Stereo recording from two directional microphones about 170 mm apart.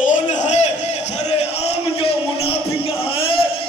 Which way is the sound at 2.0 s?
35° left (ahead or behind).